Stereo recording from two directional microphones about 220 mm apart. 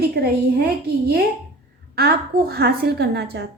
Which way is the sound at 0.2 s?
45° right (ahead or behind).